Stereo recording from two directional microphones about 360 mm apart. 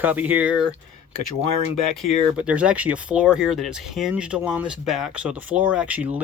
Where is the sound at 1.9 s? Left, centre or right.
Centre.